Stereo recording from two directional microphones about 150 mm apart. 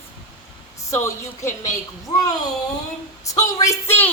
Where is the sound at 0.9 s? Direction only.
20° left (ahead or behind).